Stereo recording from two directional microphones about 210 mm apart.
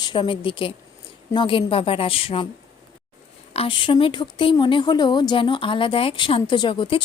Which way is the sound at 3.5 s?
25° left (ahead or behind).